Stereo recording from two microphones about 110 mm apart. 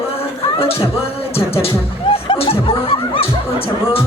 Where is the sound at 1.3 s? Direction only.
65° left (ahead or behind).